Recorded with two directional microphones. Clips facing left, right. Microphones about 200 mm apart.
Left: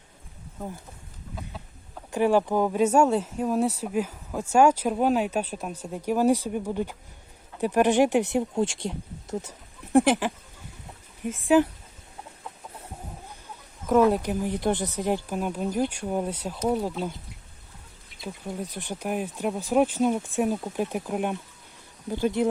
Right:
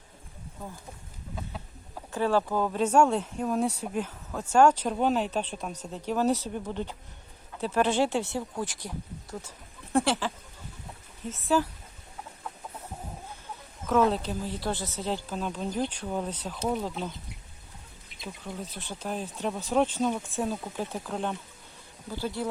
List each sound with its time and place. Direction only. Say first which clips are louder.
2.1 s speech: left 4 dB; 15° left (ahead or behind)
13.8 s speech: left 4 dB; 10° left (ahead or behind)
18.2 s speech: left 4 dB; 15° left (ahead or behind)